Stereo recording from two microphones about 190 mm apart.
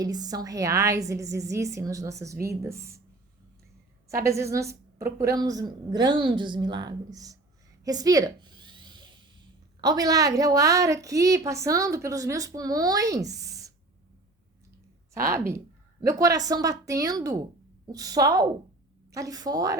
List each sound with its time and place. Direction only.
0.0 s a woman's voice: 20° right (ahead or behind)
4.1 s a woman's voice: 15° right (ahead or behind)
7.9 s a sound: 20° right (ahead or behind)
9.8 s a woman's voice: 20° right (ahead or behind)
15.1 s a woman's voice: 15° right (ahead or behind)